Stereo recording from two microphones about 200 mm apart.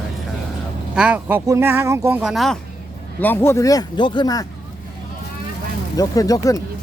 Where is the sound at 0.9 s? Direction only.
5° right (ahead or behind); by 4.4 s 20° left (ahead or behind).